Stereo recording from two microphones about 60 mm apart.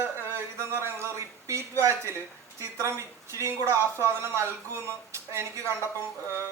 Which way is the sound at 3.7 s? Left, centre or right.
Left.